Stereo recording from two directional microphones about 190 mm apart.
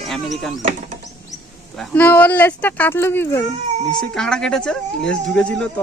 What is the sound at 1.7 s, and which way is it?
Speech, 5° left (ahead or behind).